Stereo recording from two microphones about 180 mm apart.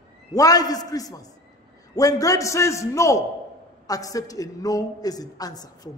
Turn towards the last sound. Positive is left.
turn(degrees=20)  # may be behind; listen again after turning